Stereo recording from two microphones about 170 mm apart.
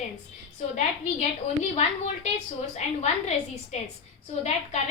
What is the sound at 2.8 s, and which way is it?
A woman's voice, 40° left (ahead or behind).